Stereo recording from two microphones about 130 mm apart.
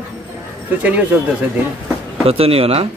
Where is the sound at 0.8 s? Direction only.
10° right (ahead or behind).